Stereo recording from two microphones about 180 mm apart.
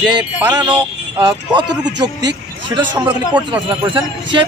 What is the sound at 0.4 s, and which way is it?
Speech, 10° right (ahead or behind).